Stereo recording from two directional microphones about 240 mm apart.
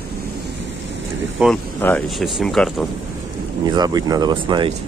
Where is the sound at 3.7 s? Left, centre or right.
Centre.